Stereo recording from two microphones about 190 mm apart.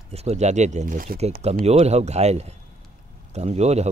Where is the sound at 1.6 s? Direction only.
35° right (ahead or behind).